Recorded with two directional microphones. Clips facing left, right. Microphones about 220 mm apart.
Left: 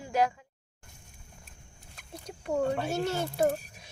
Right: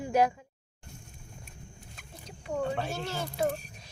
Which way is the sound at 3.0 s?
45° left (ahead or behind).